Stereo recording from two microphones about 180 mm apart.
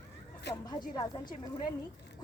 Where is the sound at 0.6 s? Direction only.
25° left (ahead or behind).